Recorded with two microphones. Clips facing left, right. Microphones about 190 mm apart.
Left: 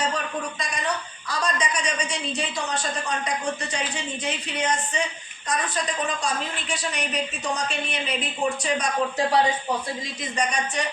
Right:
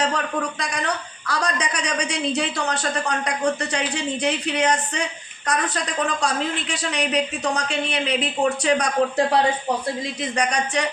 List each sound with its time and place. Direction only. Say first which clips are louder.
0.6 s a man's voice: right 2 dB; 75° right (ahead or behind)
10.3 s a man's voice: right 2 dB; 75° right (ahead or behind)